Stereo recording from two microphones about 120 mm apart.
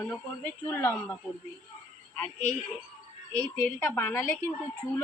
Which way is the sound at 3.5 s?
20° left (ahead or behind).